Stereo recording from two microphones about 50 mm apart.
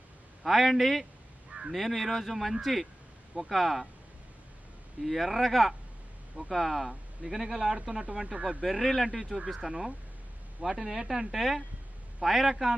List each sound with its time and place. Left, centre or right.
0.4 s speech: centre
1.5 s a sound: centre
1.7 s speech: centre
5.0 s speech: centre
8.6 s speech: centre
9.3 s speech: centre